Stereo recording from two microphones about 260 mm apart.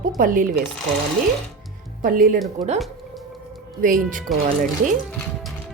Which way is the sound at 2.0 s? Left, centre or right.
Right.